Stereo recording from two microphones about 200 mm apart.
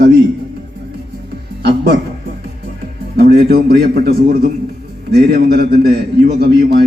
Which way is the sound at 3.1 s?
50° right (ahead or behind).